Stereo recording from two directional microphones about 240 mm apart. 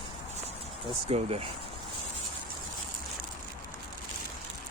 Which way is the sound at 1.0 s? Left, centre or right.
Right.